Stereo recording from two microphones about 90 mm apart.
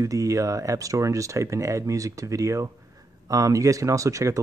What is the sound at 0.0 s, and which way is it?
Speech, 40° right (ahead or behind).